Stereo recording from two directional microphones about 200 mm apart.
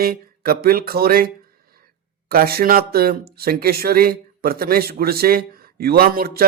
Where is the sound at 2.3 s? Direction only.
50° right (ahead or behind).